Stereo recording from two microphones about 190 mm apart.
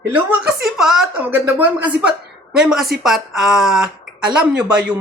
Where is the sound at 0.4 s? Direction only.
Centre (ahead or behind).